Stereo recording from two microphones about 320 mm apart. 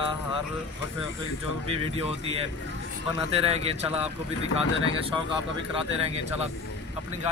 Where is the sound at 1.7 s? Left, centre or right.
Centre.